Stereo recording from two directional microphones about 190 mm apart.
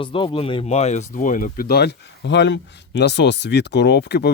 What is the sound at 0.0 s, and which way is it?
Speech, 25° left (ahead or behind).